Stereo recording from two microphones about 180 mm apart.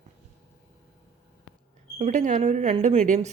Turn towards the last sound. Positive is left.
turn(degrees=-40)  # may be behind; listen again after turning